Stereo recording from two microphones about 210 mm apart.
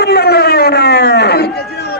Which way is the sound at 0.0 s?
50° left (ahead or behind).